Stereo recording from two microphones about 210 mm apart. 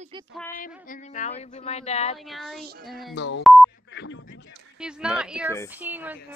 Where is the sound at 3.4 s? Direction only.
Centre (ahead or behind).